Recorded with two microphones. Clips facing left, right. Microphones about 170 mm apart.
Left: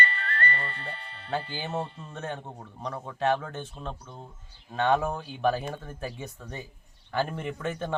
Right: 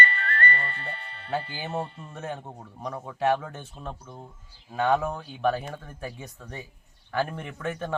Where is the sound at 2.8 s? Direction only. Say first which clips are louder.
Right 1 dB; 10° right (ahead or behind).